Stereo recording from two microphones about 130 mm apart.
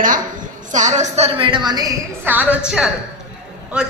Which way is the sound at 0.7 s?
70° right (ahead or behind).